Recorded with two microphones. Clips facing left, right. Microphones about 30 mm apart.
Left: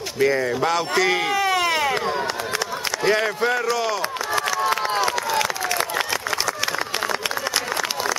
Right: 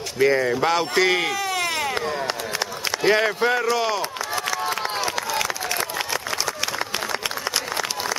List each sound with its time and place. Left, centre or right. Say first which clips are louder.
0.2 s speech: right 1 dB; centre
1.3 s a sound: left 4 dB; left
3.0 s speech: right 1 dB; centre
5.0 s crowd: left 3 dB; centre